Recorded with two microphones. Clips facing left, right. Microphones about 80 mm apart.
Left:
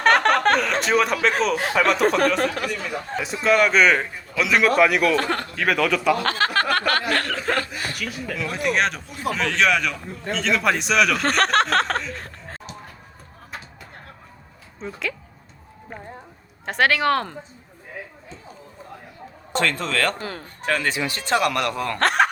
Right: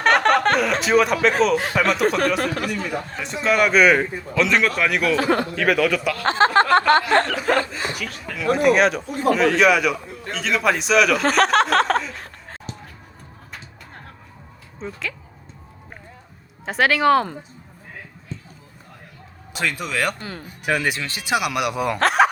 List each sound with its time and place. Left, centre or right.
0.0 s speech: centre
6.2 s speech: right
7.3 s speech: centre
7.8 s speech: right
8.2 s speech: centre
14.8 s speech: centre
16.6 s speech: centre
19.5 s speech: centre
20.1 s speech: centre
20.7 s speech: centre
22.0 s speech: centre